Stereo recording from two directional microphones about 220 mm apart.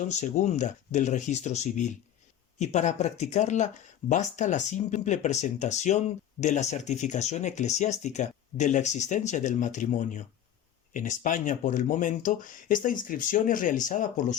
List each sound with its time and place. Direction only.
0.2 s speech: 30° left (ahead or behind)